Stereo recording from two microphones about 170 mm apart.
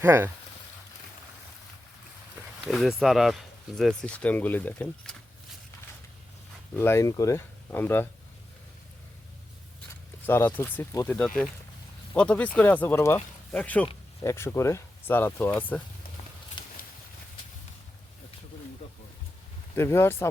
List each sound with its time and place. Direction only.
0.0 s speech: 15° right (ahead or behind)
2.6 s speech: centre (ahead or behind)
6.7 s speech: 15° left (ahead or behind)
10.2 s speech: 15° left (ahead or behind)
16.6 s a sound: 25° left (ahead or behind)
19.7 s speech: 15° left (ahead or behind)